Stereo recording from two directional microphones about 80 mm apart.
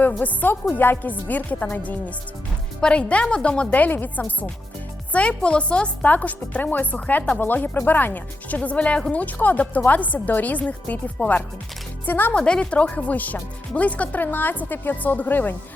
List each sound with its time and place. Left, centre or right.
0.0 s a woman's voice: centre
12.4 s a woman's voice: centre